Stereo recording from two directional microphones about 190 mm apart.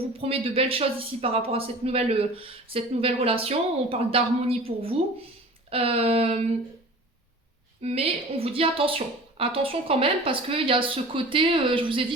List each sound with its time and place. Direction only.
0.2 s speech: 30° right (ahead or behind)
7.8 s a woman's voice: 30° right (ahead or behind)